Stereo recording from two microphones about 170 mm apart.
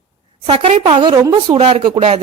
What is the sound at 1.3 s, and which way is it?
Speech, 35° right (ahead or behind).